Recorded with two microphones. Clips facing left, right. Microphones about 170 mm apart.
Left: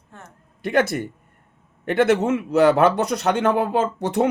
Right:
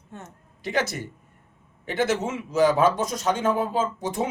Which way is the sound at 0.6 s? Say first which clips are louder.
Left 6 dB; 55° left (ahead or behind).